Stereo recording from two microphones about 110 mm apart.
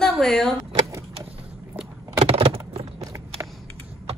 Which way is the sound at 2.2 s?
65° right (ahead or behind).